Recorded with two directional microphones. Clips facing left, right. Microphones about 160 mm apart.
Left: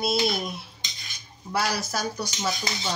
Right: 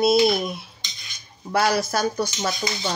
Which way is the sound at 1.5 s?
55° right (ahead or behind).